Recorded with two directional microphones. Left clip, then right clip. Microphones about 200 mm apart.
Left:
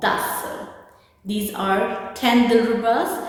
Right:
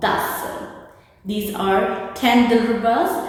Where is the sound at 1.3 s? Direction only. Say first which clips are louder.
Right 2 dB; 20° left (ahead or behind).